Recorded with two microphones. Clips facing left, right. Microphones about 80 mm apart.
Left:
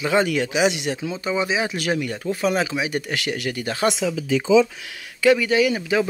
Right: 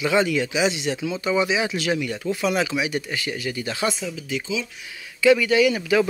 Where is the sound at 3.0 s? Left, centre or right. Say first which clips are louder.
Left 2 dB; left.